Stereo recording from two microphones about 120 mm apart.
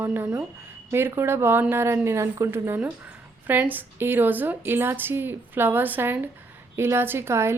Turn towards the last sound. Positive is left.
turn(degrees=-20)  # may be behind; listen again after turning